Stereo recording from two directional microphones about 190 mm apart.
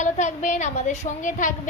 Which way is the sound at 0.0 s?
40° left (ahead or behind).